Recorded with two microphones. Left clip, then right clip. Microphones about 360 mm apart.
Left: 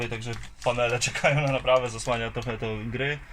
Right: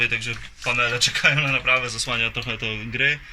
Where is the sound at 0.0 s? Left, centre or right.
Left.